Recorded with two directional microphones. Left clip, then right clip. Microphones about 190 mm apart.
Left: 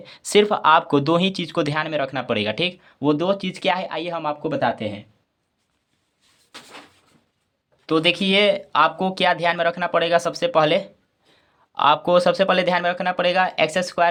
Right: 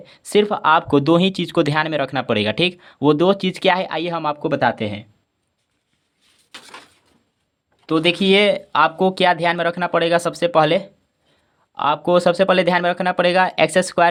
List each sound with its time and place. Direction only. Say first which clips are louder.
0.0 s speech: even; 20° right (ahead or behind); by 5.0 s 40° right (ahead or behind)
7.9 s speech: right 3 dB; 30° right (ahead or behind)